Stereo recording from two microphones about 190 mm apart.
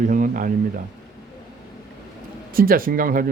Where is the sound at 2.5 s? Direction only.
50° right (ahead or behind).